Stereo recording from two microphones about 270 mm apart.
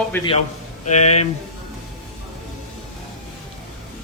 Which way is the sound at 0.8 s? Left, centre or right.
Left.